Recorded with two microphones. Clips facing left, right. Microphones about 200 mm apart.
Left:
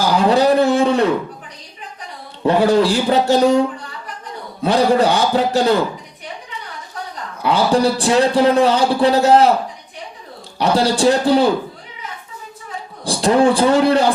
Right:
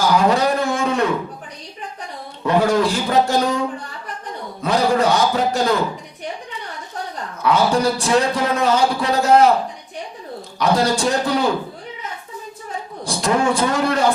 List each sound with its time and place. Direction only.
0.1 s a sound: 30° left (ahead or behind)
2.4 s a man's voice: 30° left (ahead or behind)
4.6 s a man's voice: 30° left (ahead or behind)
7.4 s a man's voice: 30° left (ahead or behind)
10.6 s a man's voice: 30° left (ahead or behind)
13.1 s a man's voice: 30° left (ahead or behind)